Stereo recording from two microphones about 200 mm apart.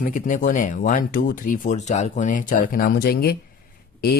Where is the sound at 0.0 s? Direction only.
40° left (ahead or behind).